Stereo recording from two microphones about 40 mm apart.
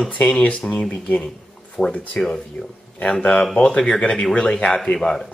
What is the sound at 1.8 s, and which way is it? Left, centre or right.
Speech, left.